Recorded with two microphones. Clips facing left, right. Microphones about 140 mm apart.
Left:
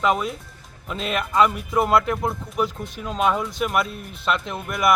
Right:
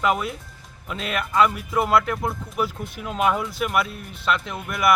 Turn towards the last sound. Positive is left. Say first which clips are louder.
# left 1 dB
turn(degrees=0)  # may be behind; listen again after turning